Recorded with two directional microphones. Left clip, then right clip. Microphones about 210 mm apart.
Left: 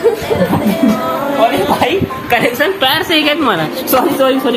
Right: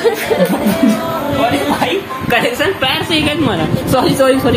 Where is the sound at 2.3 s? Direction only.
15° left (ahead or behind).